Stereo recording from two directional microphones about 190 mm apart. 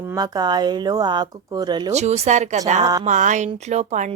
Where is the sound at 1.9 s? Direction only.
35° right (ahead or behind).